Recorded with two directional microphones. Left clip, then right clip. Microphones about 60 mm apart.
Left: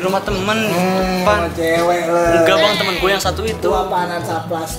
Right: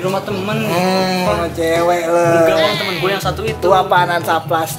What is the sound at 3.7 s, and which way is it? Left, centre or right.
Speech, right.